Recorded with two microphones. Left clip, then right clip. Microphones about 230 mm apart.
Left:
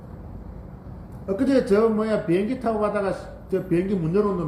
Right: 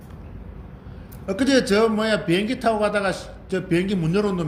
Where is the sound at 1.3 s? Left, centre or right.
Right.